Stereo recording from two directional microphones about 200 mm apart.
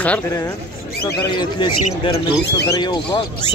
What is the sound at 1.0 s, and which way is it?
Speech, 20° left (ahead or behind).